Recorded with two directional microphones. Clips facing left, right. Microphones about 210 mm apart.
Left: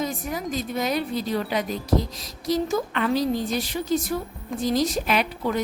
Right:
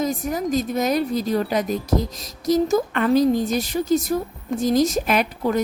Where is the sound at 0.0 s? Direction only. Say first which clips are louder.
Right 5 dB; 40° right (ahead or behind).